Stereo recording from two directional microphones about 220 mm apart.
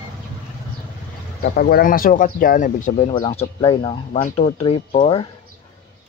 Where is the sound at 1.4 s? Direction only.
45° left (ahead or behind); by 5.2 s 25° left (ahead or behind).